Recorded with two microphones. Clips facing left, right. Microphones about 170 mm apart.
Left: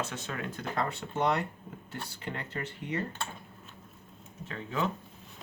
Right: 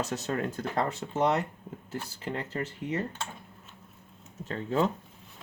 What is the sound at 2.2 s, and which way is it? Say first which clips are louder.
Speech: right 4 dB; 30° right (ahead or behind).